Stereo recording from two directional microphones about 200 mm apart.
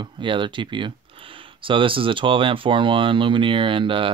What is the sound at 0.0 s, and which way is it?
Speech, 25° right (ahead or behind).